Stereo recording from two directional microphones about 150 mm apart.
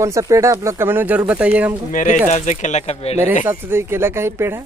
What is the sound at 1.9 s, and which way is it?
Speech, 60° left (ahead or behind).